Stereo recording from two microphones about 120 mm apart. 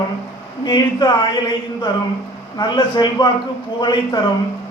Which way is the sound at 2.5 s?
40° left (ahead or behind).